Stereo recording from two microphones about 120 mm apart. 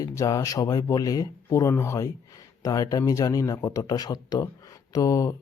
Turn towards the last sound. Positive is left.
turn(degrees=30)  # may be behind; listen again after turning